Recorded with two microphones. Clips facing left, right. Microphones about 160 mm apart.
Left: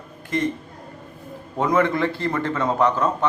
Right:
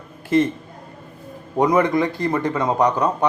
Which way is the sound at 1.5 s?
15° right (ahead or behind).